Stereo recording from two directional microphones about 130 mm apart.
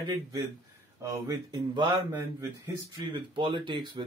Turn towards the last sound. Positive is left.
turn(degrees=-35)  # may be behind; listen again after turning